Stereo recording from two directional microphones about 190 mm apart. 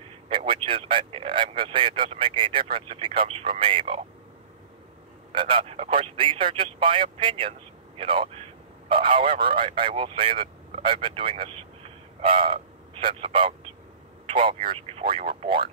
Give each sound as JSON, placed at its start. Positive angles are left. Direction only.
{"t": 0.3, "sound": "a man's voice", "side_deg": -30}
{"t": 5.3, "sound": "a man's voice", "side_deg": -25}